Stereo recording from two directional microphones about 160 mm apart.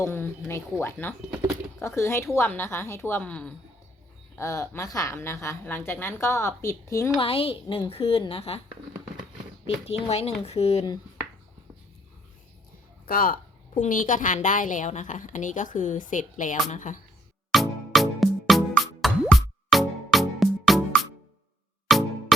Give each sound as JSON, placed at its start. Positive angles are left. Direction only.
{"t": 0.0, "sound": "a woman's voice", "side_deg": 15}
{"t": 1.3, "sound": "speech", "side_deg": -15}
{"t": 1.8, "sound": "a woman's voice", "side_deg": 15}
{"t": 7.2, "sound": "a woman's voice", "side_deg": 35}
{"t": 9.6, "sound": "a woman's voice", "side_deg": 40}
{"t": 13.1, "sound": "a woman's voice", "side_deg": 65}
{"t": 17.5, "sound": "music", "side_deg": 0}